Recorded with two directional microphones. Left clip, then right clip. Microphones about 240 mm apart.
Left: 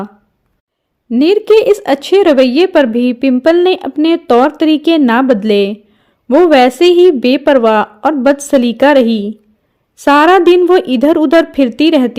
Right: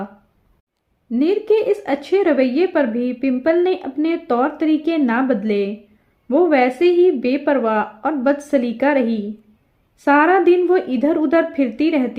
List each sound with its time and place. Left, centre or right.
1.1 s speech: left